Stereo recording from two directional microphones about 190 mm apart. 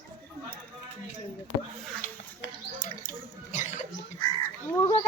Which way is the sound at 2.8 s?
40° left (ahead or behind).